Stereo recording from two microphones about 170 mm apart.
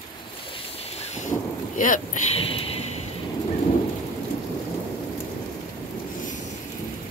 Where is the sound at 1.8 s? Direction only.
50° left (ahead or behind).